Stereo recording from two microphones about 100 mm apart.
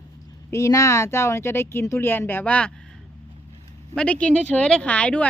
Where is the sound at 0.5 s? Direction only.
30° left (ahead or behind); by 2.7 s 10° left (ahead or behind).